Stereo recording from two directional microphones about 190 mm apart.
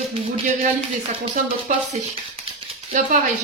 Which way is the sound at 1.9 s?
35° right (ahead or behind).